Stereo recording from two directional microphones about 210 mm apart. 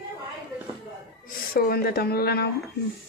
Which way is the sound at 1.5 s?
45° left (ahead or behind).